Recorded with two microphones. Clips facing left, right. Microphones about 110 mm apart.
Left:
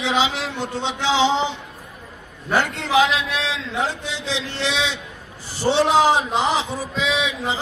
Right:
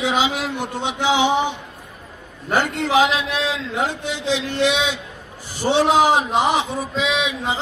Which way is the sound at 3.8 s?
15° right (ahead or behind).